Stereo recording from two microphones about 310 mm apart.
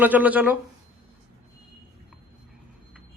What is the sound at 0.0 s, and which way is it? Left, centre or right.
Speech, centre.